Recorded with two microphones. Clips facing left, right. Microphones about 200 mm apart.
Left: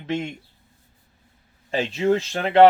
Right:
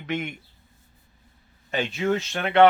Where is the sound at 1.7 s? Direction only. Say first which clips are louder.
Left 4 dB; 30° left (ahead or behind).